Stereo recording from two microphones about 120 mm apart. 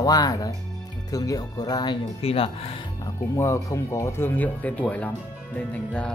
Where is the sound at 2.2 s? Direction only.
55° left (ahead or behind).